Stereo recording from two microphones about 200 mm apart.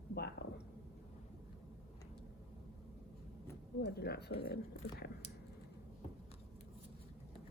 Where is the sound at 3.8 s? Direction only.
55° left (ahead or behind).